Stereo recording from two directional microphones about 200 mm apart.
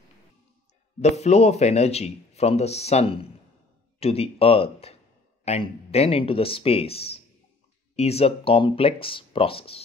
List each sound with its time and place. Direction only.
1.0 s speech: 35° left (ahead or behind)